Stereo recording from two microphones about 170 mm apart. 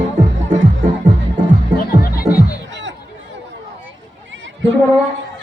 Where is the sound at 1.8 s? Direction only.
60° left (ahead or behind).